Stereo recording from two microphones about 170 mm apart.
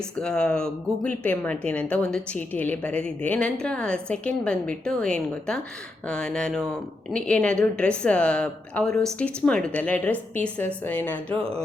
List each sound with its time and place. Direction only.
0.2 s speech: 5° left (ahead or behind)